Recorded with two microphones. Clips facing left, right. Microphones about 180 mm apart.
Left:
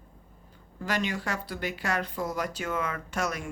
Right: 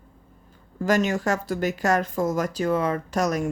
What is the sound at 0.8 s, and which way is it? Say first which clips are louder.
Speech: right 9 dB; 45° right (ahead or behind).